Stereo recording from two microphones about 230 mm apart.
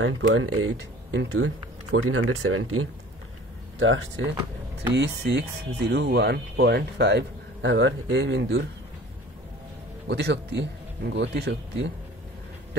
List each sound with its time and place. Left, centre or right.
0.0 s speech: right
10.0 s speech: right